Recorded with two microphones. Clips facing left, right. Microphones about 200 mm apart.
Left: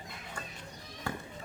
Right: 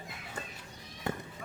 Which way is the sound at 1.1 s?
20° right (ahead or behind).